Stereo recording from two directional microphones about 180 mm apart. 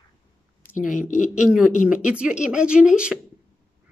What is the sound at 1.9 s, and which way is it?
Speech, 5° right (ahead or behind).